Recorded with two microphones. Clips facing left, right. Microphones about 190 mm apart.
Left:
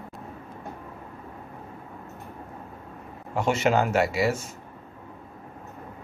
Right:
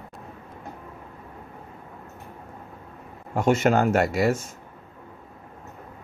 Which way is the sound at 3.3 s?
50° right (ahead or behind).